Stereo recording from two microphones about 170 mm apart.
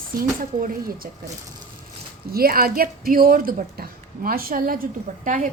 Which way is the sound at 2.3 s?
60° right (ahead or behind).